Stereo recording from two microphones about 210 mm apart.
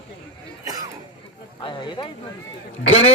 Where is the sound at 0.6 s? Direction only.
15° right (ahead or behind).